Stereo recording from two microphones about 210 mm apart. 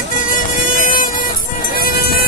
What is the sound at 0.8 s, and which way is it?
Music, 40° left (ahead or behind).